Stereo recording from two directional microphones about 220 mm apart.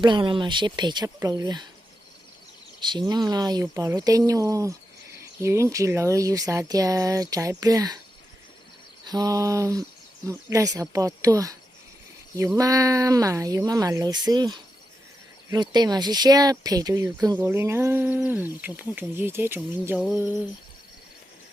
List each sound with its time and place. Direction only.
0.0 s speech: 20° right (ahead or behind)
2.8 s speech: 20° right (ahead or behind)
9.0 s speech: 15° right (ahead or behind)
12.5 s speech: 15° right (ahead or behind)